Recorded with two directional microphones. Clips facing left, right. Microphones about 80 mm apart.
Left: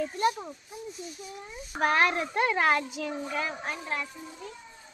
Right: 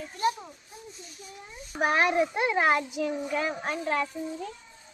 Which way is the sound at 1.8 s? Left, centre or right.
Centre.